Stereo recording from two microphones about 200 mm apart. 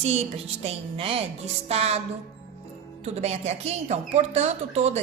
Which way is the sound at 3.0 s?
30° right (ahead or behind).